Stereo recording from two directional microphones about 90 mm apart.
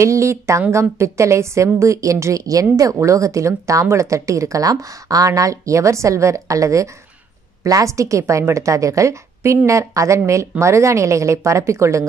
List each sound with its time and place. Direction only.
0.0 s speech: 30° right (ahead or behind)